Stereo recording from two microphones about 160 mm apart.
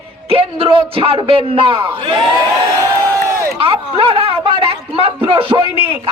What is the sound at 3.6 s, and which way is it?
Speech, 35° right (ahead or behind).